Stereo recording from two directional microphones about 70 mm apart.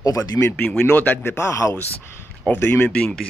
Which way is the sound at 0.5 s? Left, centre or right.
Centre.